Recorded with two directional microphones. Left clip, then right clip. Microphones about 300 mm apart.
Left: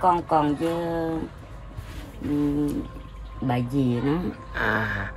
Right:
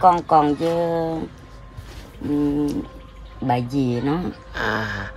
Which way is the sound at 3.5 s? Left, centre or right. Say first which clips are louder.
Right 4 dB; centre.